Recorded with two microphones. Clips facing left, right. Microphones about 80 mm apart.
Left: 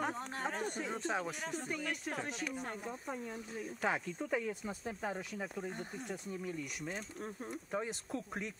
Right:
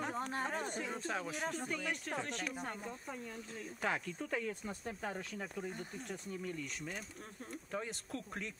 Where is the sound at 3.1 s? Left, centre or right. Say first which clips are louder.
Left 3 dB; centre.